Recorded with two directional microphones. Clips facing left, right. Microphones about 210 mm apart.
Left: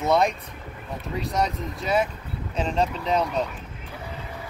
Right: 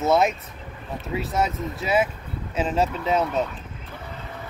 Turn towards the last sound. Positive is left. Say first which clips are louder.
# right 1 dB
turn(degrees=-5)  # may be behind; listen again after turning